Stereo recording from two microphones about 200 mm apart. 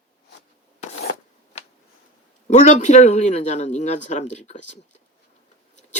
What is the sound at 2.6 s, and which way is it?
Speech, 35° left (ahead or behind).